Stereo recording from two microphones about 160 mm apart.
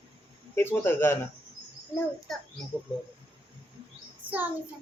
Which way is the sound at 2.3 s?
Centre (ahead or behind).